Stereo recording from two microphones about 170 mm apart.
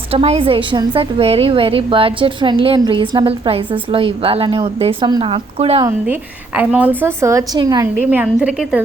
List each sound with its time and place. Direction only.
0.1 s a woman's voice: 35° right (ahead or behind)
6.6 s a woman's voice: 10° right (ahead or behind)
7.9 s a woman's voice: 10° right (ahead or behind)